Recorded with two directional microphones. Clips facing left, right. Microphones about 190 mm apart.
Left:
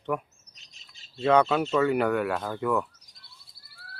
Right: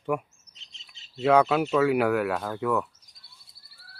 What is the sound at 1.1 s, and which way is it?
Speech, 10° right (ahead or behind).